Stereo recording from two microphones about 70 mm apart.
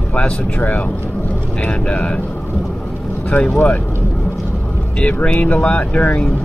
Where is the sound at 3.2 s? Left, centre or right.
Left.